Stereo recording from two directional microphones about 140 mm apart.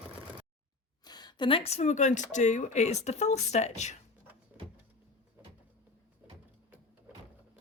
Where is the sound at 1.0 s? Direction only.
30° left (ahead or behind); by 4.0 s 55° left (ahead or behind).